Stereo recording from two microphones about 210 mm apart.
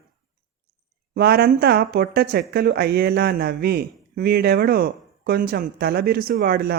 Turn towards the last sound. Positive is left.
turn(degrees=-50)  # may be behind; listen again after turning